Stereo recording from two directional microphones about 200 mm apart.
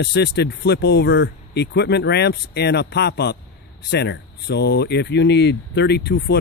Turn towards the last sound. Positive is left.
turn(degrees=55)  # may be behind; listen again after turning